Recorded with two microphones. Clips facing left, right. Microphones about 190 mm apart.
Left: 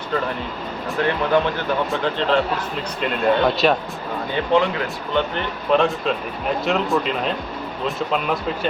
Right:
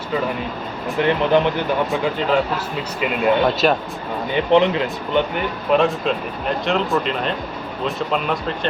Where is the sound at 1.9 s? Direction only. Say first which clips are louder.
Right 1 dB; 5° right (ahead or behind).